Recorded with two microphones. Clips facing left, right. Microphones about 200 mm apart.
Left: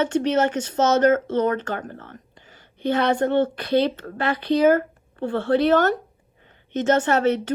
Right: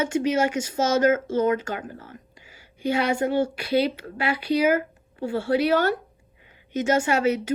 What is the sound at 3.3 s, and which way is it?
Speech, 50° left (ahead or behind).